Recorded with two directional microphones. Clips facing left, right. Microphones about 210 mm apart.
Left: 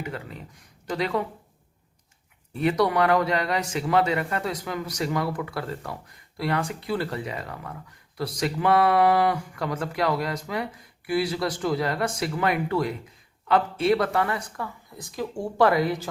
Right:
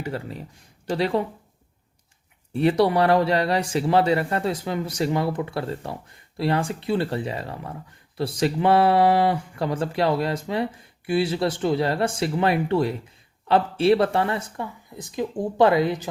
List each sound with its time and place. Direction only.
0.0 s speech: 30° right (ahead or behind)
2.6 s a man's voice: 30° right (ahead or behind)